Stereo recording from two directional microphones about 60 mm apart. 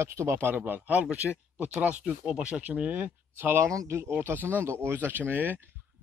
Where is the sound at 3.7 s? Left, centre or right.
Right.